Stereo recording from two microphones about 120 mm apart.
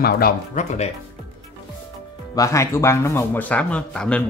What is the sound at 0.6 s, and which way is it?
Speech, 90° left.